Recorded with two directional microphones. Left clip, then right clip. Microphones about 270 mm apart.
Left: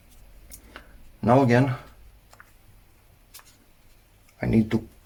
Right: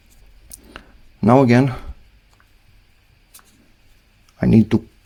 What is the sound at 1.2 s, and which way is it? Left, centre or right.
Speech, right.